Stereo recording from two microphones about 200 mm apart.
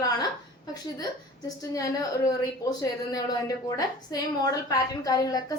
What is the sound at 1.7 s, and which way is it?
A woman's voice, 15° left (ahead or behind).